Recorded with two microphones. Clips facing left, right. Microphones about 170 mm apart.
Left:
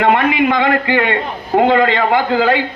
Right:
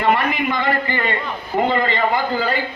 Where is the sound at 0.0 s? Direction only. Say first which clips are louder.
Left 5 dB; 75° left (ahead or behind).